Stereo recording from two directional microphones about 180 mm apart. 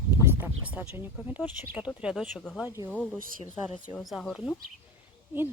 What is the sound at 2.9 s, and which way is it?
Speech, centre (ahead or behind).